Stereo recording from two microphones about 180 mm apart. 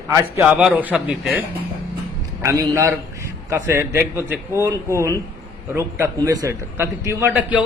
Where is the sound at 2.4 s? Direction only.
15° right (ahead or behind).